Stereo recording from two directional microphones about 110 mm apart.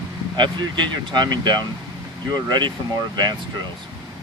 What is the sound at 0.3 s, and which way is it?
Speech, 45° right (ahead or behind).